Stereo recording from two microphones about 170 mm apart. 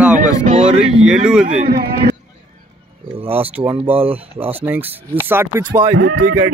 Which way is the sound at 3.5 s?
10° right (ahead or behind).